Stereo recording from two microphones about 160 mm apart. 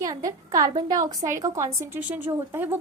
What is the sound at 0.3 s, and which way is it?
A woman's voice, 20° right (ahead or behind).